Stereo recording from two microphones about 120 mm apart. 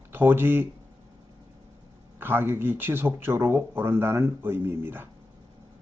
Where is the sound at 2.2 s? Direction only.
20° right (ahead or behind).